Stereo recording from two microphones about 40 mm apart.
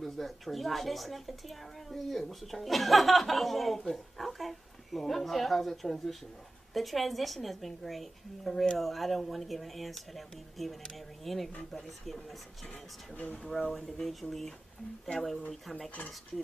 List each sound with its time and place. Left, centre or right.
0.0 s a woman's voice: centre
13.1 s speech: left
13.7 s speech: centre